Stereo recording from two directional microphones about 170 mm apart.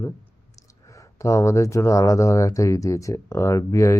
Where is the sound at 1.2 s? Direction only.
15° left (ahead or behind).